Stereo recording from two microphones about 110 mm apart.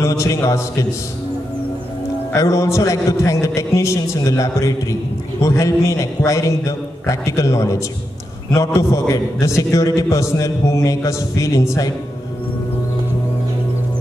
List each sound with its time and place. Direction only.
0.0 s a man's voice: 30° left (ahead or behind)
2.3 s a man's voice: 30° left (ahead or behind)